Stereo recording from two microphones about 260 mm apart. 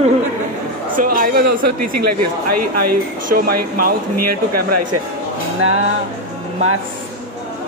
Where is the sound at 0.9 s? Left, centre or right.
Right.